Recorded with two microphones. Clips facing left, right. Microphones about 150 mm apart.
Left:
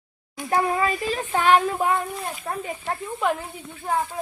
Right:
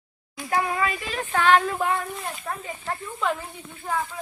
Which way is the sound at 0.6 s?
35° left (ahead or behind).